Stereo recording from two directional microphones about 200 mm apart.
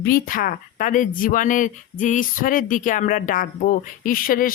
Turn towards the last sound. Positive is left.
turn(degrees=45)  # may be behind; listen again after turning